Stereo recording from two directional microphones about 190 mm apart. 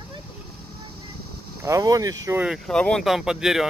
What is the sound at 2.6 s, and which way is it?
Speech, 5° left (ahead or behind).